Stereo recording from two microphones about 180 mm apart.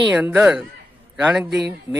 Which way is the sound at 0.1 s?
5° right (ahead or behind).